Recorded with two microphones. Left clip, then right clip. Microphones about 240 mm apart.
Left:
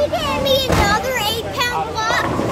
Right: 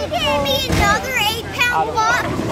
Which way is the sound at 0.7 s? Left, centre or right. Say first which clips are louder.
Even; centre.